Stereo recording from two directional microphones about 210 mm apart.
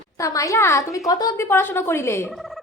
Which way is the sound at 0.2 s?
15° left (ahead or behind).